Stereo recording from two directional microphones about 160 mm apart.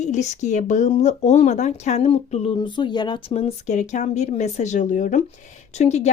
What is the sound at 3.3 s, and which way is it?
Speech, 45° left (ahead or behind).